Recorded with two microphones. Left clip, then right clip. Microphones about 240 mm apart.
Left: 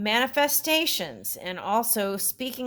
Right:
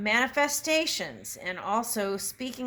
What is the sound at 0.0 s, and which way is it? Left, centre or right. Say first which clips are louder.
Speech: left 2 dB; left.